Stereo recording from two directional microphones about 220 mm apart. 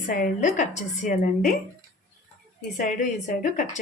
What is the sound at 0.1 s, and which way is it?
Speech, 35° left (ahead or behind).